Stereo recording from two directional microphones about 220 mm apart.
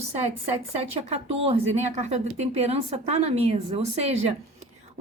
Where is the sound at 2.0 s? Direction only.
30° right (ahead or behind).